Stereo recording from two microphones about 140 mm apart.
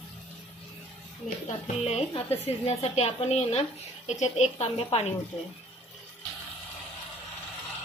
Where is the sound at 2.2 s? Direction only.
45° left (ahead or behind).